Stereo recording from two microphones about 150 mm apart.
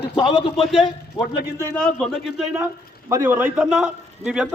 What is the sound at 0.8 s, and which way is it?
Speech, 35° left (ahead or behind).